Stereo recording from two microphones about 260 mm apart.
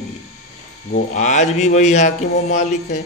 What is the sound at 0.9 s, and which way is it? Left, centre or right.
Speech, left.